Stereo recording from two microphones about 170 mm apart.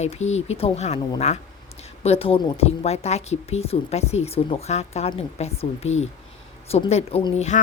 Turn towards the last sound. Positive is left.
turn(degrees=40)  # may be behind; listen again after turning